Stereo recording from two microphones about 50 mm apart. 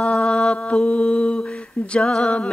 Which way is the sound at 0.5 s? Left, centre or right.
Left.